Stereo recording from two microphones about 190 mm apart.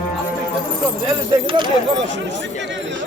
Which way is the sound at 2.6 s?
70° right (ahead or behind).